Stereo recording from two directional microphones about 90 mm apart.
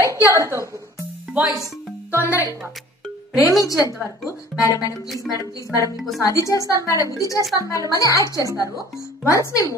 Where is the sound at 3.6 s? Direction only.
40° left (ahead or behind).